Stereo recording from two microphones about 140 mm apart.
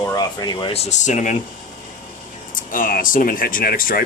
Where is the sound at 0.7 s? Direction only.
55° left (ahead or behind).